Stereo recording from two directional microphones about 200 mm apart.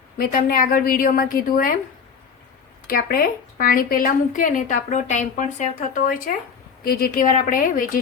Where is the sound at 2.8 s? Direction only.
45° left (ahead or behind).